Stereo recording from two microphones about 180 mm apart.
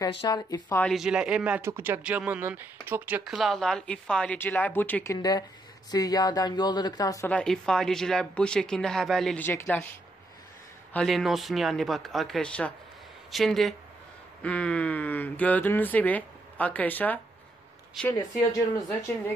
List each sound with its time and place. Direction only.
0.1 s speech: 25° left (ahead or behind)
0.8 s speech: centre (ahead or behind); by 7.2 s 20° left (ahead or behind)
7.2 s speech: 5° left (ahead or behind)
10.9 s speech: 5° left (ahead or behind)